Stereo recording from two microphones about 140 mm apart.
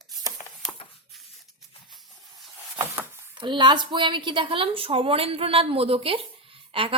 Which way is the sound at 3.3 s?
35° right (ahead or behind).